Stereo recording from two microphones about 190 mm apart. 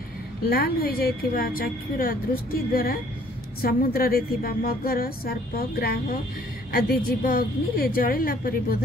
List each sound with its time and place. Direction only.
0.5 s speech: 50° left (ahead or behind)